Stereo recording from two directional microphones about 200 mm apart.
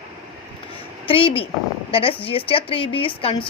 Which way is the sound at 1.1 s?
25° left (ahead or behind).